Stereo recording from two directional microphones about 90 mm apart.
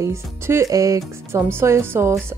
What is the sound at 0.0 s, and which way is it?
Speech, 30° right (ahead or behind).